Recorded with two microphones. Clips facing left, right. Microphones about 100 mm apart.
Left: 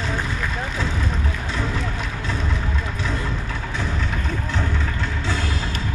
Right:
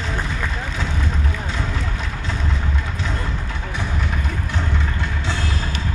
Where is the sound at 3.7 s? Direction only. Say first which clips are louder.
Right 1 dB; 15° right (ahead or behind).